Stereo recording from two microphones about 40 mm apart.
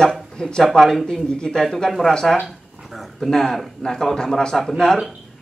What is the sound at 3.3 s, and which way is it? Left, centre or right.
Speech, centre.